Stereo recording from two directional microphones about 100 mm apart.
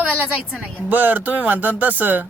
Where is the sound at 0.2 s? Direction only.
15° right (ahead or behind).